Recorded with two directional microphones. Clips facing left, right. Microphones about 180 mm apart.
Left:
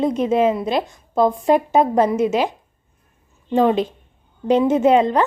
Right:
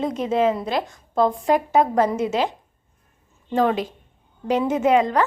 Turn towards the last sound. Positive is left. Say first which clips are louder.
# left 3 dB
turn(degrees=25)  # may be behind; listen again after turning